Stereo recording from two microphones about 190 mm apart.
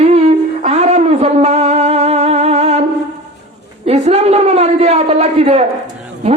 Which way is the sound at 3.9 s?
35° right (ahead or behind).